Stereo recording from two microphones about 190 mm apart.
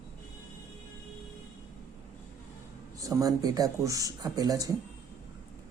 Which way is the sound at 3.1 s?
20° right (ahead or behind).